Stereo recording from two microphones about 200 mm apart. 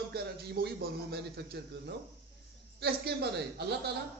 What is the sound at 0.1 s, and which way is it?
A man's voice, 50° right (ahead or behind).